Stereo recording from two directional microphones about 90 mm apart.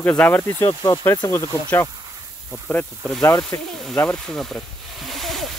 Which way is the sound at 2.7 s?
10° left (ahead or behind).